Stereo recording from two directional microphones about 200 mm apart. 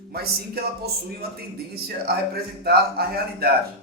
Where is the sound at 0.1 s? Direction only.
50° right (ahead or behind).